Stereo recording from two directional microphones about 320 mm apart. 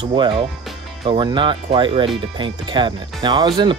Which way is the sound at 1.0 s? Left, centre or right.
Centre.